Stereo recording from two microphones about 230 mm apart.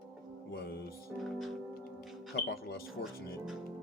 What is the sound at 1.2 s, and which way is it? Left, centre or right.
Speech, centre.